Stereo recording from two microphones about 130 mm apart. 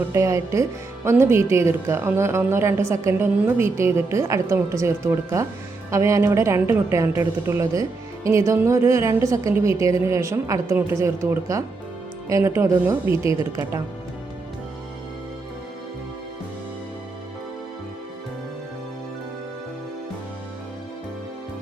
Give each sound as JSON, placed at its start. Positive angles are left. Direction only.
{"t": 0.1, "sound": "speech", "side_deg": -20}